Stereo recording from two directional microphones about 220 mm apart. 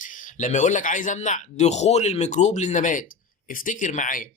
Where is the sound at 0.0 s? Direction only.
35° left (ahead or behind).